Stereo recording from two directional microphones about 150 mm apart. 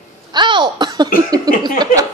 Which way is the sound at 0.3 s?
30° right (ahead or behind).